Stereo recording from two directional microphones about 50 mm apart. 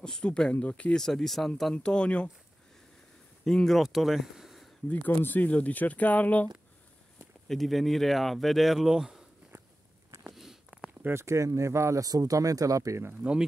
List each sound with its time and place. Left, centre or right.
0.0 s speech: centre
0.9 s speech: centre
3.4 s speech: centre
3.8 s speech: centre
5.0 s speech: left
7.4 s speech: centre
10.3 s a sound: centre
11.1 s speech: right